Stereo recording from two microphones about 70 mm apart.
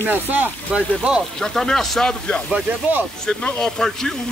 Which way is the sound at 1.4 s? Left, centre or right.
Centre.